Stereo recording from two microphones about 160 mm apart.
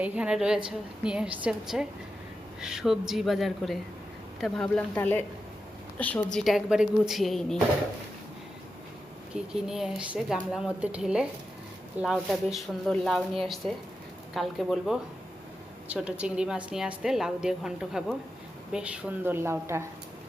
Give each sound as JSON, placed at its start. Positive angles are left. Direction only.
{"t": 0.0, "sound": "a woman's voice", "side_deg": -10}
{"t": 6.4, "sound": "a woman's voice", "side_deg": -5}
{"t": 9.3, "sound": "a woman's voice", "side_deg": -5}